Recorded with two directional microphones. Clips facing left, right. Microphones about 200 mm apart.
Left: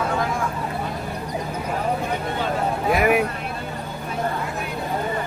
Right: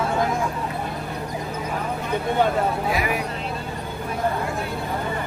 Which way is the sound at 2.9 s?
55° left (ahead or behind).